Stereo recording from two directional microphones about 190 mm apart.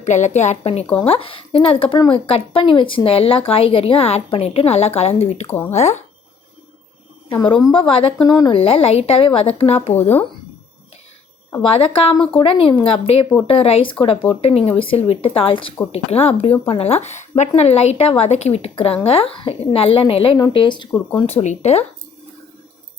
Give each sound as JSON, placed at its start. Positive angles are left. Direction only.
{"t": 0.0, "sound": "speech", "side_deg": 40}
{"t": 5.5, "sound": "speech", "side_deg": 10}
{"t": 5.7, "sound": "speech", "side_deg": 35}
{"t": 7.4, "sound": "speech", "side_deg": 25}
{"t": 11.7, "sound": "speech", "side_deg": 30}
{"t": 21.2, "sound": "speech", "side_deg": 35}